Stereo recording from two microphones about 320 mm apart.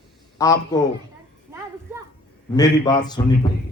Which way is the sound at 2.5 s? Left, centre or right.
Centre.